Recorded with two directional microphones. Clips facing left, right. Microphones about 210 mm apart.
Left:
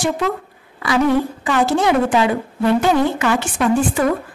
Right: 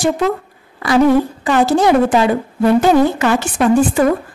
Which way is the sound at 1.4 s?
35° right (ahead or behind).